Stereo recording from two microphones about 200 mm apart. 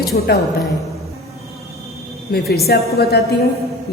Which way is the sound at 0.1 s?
50° left (ahead or behind).